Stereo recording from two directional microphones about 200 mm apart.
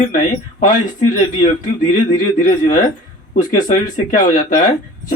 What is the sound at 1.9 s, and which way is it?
Speech, 40° left (ahead or behind).